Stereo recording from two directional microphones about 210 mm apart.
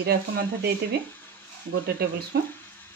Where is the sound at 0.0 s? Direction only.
45° right (ahead or behind).